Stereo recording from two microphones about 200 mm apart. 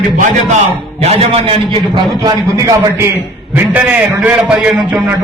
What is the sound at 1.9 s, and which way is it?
A man's voice, 20° right (ahead or behind).